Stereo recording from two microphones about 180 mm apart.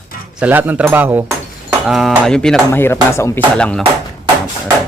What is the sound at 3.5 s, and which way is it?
Speech, 5° left (ahead or behind).